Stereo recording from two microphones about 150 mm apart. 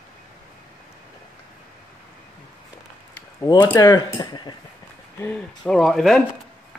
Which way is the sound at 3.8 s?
25° left (ahead or behind).